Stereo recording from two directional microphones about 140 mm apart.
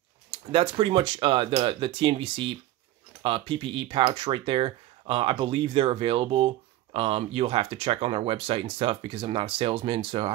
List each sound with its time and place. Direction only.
0.3 s speech: 40° right (ahead or behind)